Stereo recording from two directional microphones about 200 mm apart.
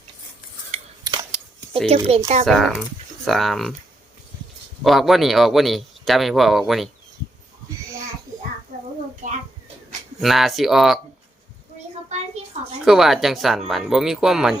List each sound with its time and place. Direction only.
0.7 s scissors: 35° right (ahead or behind)
2.0 s speech: 35° right (ahead or behind)
2.5 s speech: centre (ahead or behind)
4.8 s speech: centre (ahead or behind)
9.2 s a child's voice: 35° right (ahead or behind)
10.2 s speech: centre (ahead or behind)
12.0 s a sound: 35° right (ahead or behind)
12.8 s speech: centre (ahead or behind)